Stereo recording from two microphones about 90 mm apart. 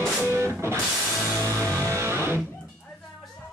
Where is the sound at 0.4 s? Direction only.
30° right (ahead or behind).